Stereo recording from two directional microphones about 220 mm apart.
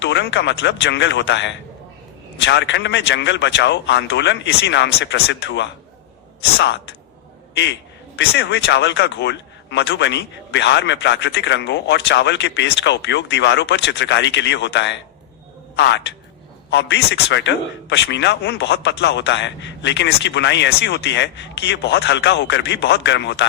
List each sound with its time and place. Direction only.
0.0 s a man's voice: 55° left (ahead or behind)